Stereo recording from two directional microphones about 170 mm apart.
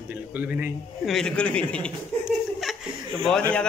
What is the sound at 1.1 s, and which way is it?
Speech, 5° left (ahead or behind).